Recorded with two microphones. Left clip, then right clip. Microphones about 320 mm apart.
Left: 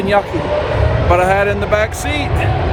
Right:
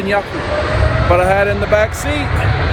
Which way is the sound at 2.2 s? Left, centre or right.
Left.